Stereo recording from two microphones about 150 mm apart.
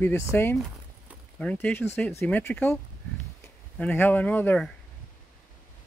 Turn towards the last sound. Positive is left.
turn(degrees=10)  # may be behind; listen again after turning